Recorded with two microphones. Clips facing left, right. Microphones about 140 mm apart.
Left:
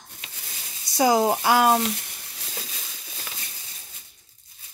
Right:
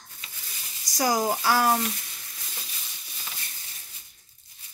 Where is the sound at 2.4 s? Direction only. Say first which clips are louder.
Left 7 dB; 90° left.